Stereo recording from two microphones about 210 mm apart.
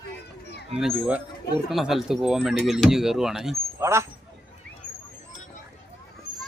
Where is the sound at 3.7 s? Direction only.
15° right (ahead or behind).